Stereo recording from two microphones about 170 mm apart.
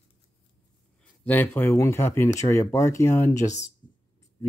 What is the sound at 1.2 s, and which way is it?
Speech, 10° left (ahead or behind).